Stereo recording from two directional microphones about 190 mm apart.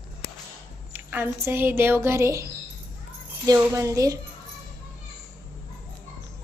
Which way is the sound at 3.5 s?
15° right (ahead or behind).